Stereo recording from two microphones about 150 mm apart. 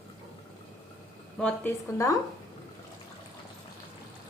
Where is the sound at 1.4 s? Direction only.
15° left (ahead or behind).